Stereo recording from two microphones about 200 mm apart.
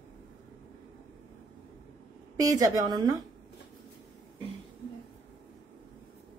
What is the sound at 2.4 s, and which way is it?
Speech, 20° right (ahead or behind).